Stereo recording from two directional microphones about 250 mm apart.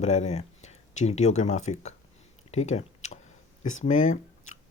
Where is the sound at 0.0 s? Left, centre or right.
Left.